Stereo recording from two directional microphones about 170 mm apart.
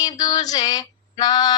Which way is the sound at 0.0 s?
25° left (ahead or behind).